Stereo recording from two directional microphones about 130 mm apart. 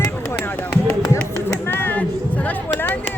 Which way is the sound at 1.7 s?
15° left (ahead or behind).